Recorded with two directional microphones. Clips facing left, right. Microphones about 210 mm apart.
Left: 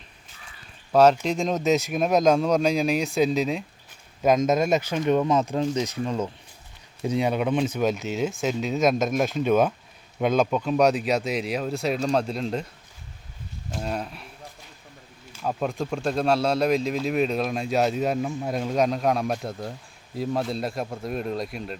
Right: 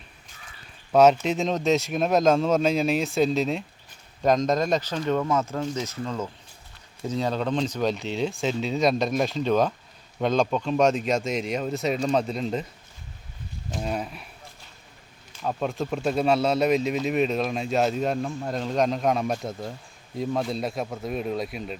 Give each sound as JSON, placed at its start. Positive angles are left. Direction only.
{"t": 0.9, "sound": "speech", "side_deg": -5}
{"t": 13.7, "sound": "speech", "side_deg": -5}
{"t": 15.3, "sound": "speech", "side_deg": 5}